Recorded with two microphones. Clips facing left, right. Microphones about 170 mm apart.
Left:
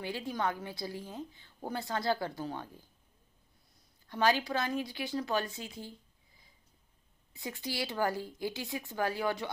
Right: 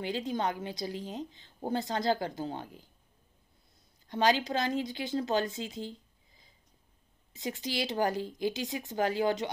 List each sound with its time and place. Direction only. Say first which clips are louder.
0.0 s a woman's voice: right 3 dB; 20° right (ahead or behind)
4.1 s a woman's voice: right 2 dB; 20° right (ahead or behind)
7.3 s a woman's voice: right 3 dB; 20° right (ahead or behind)